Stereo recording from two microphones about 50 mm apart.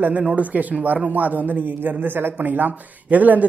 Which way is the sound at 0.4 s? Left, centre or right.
Right.